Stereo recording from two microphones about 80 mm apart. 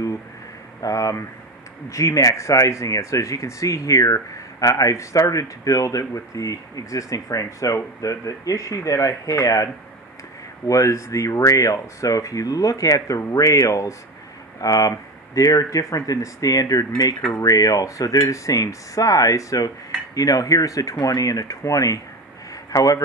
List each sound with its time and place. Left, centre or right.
0.8 s speech: left
10.7 s speech: left
22.5 s a sound: left